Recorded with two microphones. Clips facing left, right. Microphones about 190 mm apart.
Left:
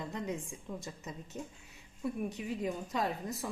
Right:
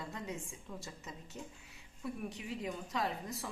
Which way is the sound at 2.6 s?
20° left (ahead or behind).